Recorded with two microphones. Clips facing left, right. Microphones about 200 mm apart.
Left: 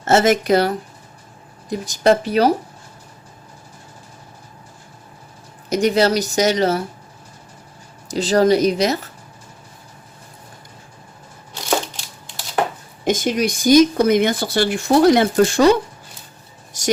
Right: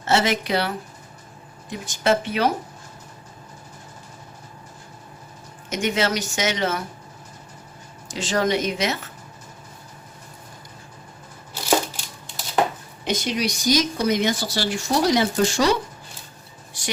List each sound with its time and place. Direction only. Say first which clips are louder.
0.0 s speech: left 6 dB; 45° left (ahead or behind)
5.6 s speech: left 7 dB; 35° left (ahead or behind)
8.0 s speech: left 8 dB; 35° left (ahead or behind)
13.1 s speech: left 6 dB; 45° left (ahead or behind)
16.7 s a sound: left 10 dB; 45° left (ahead or behind)